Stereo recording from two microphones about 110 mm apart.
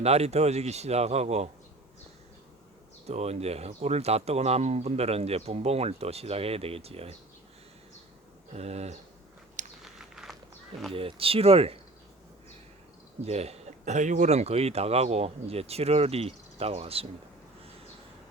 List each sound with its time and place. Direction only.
0.0 s speech: 75° right (ahead or behind)
3.1 s speech: 75° right (ahead or behind)
8.5 s speech: 80° right
9.8 s biting: 5° right (ahead or behind)
10.9 s speech: 60° right (ahead or behind)
13.2 s speech: 70° right (ahead or behind)